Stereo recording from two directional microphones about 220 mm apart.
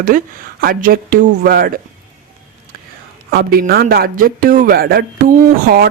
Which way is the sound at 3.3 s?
45° right (ahead or behind).